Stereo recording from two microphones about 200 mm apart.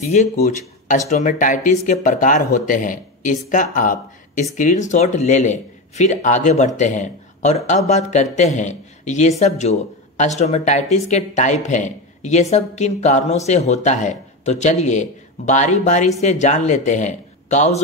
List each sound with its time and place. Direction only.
0.0 s speech: 35° left (ahead or behind)